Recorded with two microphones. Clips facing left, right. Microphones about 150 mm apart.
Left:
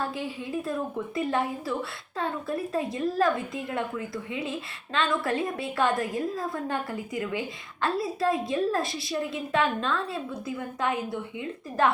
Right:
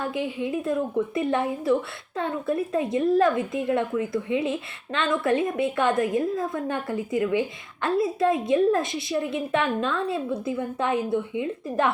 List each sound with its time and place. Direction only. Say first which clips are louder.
0.1 s speech: right 5 dB; 20° right (ahead or behind)